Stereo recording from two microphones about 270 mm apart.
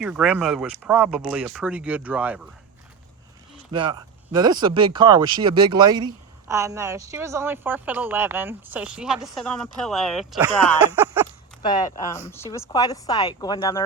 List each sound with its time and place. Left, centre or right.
0.0 s speech: centre
3.7 s speech: centre
10.9 s a sound: centre
11.6 s speech: centre